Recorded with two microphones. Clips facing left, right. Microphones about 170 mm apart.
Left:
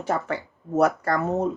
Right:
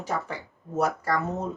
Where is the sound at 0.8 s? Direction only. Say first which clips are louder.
Left 5 dB; 65° left (ahead or behind).